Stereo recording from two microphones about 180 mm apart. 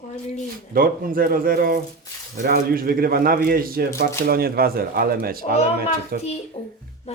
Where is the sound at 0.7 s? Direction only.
50° right (ahead or behind).